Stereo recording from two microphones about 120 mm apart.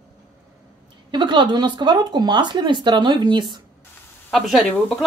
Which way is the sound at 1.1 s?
40° right (ahead or behind).